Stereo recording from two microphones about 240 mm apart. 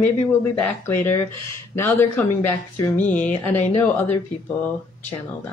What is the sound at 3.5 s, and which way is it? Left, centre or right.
Speech, left.